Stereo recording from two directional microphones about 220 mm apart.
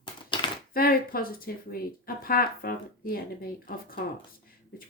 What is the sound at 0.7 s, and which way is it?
Speech, 40° left (ahead or behind).